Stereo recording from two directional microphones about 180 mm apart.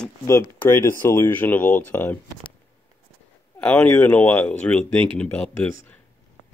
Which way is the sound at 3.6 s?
5° left (ahead or behind).